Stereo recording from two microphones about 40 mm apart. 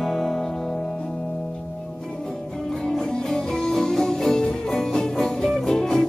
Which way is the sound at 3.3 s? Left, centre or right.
Centre.